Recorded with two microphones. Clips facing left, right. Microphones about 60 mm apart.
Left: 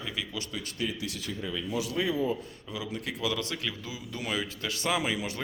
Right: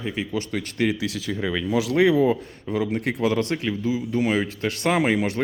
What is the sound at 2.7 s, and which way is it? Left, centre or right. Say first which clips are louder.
Speech: right 12 dB; right.